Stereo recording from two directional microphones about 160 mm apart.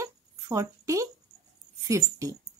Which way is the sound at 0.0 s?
20° right (ahead or behind).